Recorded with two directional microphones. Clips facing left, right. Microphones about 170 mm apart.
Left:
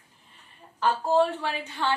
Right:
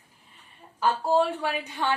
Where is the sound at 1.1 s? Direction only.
15° right (ahead or behind).